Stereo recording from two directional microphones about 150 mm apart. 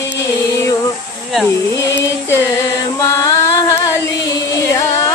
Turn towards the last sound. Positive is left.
turn(degrees=20)  # may be behind; listen again after turning